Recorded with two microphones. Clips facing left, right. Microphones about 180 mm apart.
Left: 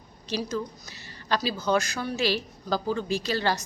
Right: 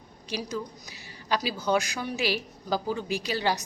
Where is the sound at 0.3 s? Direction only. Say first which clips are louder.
Left 3 dB; 15° right (ahead or behind).